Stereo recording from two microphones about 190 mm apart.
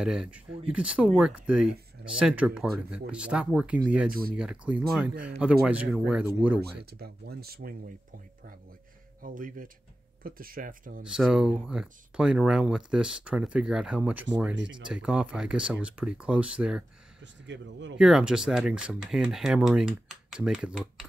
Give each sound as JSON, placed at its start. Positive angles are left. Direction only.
{"t": 0.0, "sound": "speech", "side_deg": -5}
{"t": 6.6, "sound": "speech", "side_deg": -55}
{"t": 9.2, "sound": "speech", "side_deg": -45}
{"t": 11.1, "sound": "speech", "side_deg": -5}
{"t": 17.2, "sound": "speech", "side_deg": -70}
{"t": 17.9, "sound": "speech", "side_deg": -5}